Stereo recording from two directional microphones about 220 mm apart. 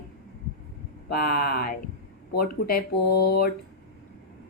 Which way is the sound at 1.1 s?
45° left (ahead or behind).